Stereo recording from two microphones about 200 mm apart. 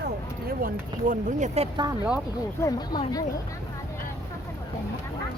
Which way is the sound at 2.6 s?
20° left (ahead or behind).